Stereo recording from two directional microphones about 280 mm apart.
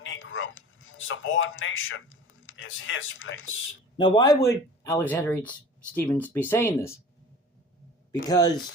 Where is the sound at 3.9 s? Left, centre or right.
Centre.